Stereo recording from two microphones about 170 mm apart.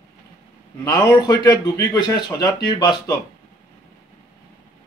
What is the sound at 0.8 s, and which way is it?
A man's voice, 20° left (ahead or behind).